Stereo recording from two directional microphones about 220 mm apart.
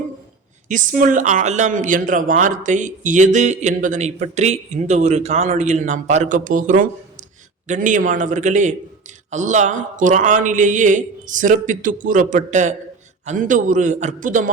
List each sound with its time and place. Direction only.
0.7 s speech: 35° right (ahead or behind)